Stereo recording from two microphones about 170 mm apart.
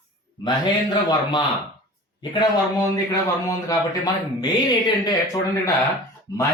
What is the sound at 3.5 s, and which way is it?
Speech, 20° left (ahead or behind).